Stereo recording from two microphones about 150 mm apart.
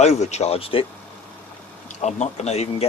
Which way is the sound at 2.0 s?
50° left (ahead or behind).